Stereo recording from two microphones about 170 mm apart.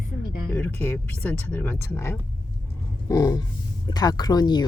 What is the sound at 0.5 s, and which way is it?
Speech, 15° left (ahead or behind).